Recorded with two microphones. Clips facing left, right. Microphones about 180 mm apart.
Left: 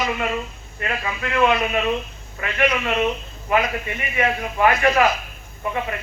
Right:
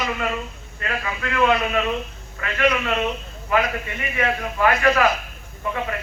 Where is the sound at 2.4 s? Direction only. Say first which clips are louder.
Left 1 dB; 20° left (ahead or behind).